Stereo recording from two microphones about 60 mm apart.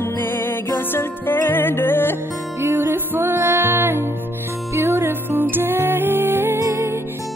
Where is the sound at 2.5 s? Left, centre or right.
Right.